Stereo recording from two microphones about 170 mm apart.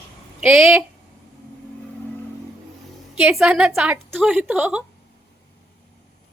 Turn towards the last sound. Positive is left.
turn(degrees=-10)  # may be behind; listen again after turning